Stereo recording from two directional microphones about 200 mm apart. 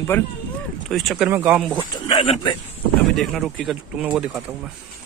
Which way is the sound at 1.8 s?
25° left (ahead or behind).